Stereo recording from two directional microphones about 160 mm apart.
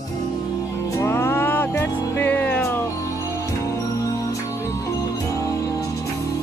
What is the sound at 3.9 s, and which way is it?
Music, 20° left (ahead or behind).